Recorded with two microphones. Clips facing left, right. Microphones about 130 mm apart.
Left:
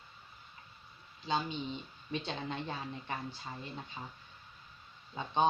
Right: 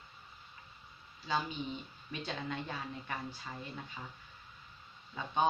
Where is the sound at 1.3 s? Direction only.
25° left (ahead or behind).